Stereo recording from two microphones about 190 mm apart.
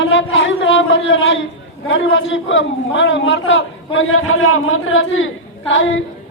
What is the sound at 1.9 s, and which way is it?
A man's voice, 80° left.